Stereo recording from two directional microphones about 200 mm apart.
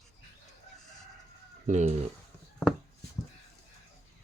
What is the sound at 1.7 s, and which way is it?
Speech, 35° right (ahead or behind).